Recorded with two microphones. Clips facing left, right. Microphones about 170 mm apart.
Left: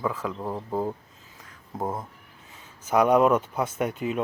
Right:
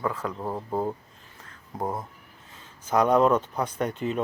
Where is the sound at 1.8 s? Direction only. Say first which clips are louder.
Even; centre (ahead or behind).